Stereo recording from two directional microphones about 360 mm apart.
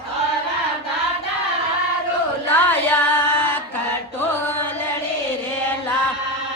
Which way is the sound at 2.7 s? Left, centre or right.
Centre.